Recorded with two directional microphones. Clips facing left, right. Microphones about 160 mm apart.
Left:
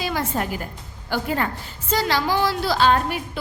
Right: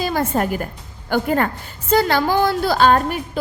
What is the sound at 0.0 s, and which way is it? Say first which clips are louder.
A woman's voice: right 5 dB; 45° right (ahead or behind).